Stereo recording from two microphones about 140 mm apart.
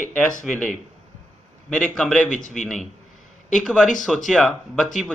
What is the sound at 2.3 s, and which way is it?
Speech, 65° left (ahead or behind).